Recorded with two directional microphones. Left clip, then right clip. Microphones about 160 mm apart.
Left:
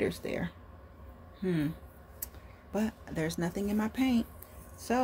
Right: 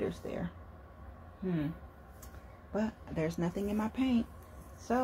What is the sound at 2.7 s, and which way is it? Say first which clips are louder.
Speech: left 1 dB; 30° left (ahead or behind).